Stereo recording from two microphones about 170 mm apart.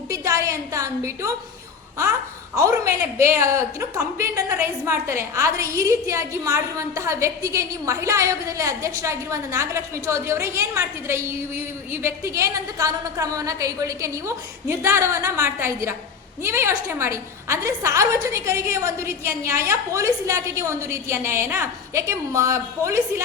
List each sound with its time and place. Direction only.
0.1 s a woman's voice: 20° right (ahead or behind)
2.6 s a woman's voice: 20° right (ahead or behind)